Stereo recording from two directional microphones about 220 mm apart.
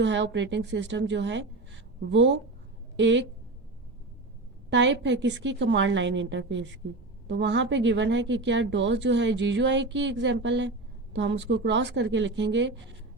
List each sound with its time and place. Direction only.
0.0 s a woman's voice: 55° right (ahead or behind)
4.7 s a woman's voice: 55° right (ahead or behind)